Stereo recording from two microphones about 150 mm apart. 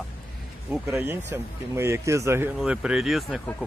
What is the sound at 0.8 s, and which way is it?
Speech, 20° right (ahead or behind).